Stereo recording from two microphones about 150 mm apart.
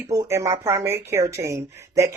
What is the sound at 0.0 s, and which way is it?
A woman's voice, 20° right (ahead or behind).